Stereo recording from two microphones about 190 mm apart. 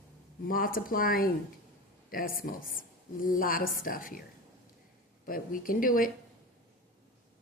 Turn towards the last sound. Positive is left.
turn(degrees=45)  # may be behind; listen again after turning